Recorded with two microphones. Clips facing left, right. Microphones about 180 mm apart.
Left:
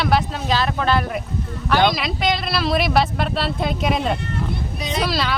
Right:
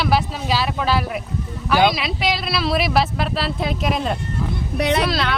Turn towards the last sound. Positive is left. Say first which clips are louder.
# right 1 dB
turn(degrees=0)  # may be behind; listen again after turning